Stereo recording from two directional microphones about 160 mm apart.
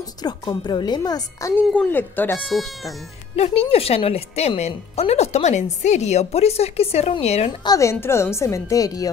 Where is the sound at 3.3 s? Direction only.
40° left (ahead or behind).